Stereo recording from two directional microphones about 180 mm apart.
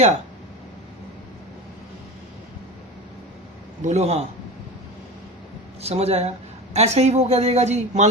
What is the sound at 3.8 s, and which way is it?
Speech, 40° right (ahead or behind).